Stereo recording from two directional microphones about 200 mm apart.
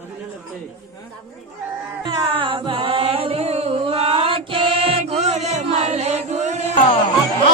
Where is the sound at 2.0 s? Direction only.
25° right (ahead or behind).